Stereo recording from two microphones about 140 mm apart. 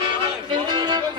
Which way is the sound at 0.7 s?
30° right (ahead or behind).